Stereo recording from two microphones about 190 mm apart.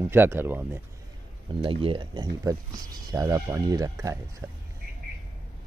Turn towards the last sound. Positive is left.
turn(degrees=-10)  # may be behind; listen again after turning